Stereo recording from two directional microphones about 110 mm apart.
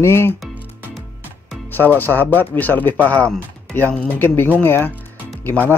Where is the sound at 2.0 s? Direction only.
15° left (ahead or behind).